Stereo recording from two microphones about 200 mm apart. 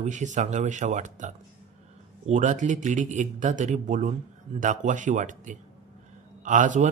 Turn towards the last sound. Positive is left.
turn(degrees=-40)  # may be behind; listen again after turning